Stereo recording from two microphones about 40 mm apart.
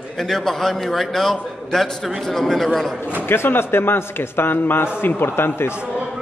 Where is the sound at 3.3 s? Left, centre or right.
Left.